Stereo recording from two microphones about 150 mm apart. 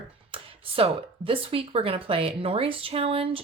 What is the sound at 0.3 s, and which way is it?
Speech, 35° right (ahead or behind).